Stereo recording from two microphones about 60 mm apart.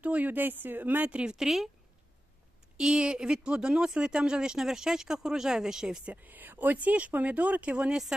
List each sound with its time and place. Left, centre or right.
0.0 s speech: right
1.1 s a woman's voice: centre
2.7 s speech: centre
6.2 s speech: right; by 8.0 s centre